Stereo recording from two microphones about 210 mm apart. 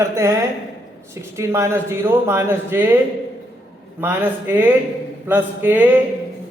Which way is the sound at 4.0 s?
10° right (ahead or behind).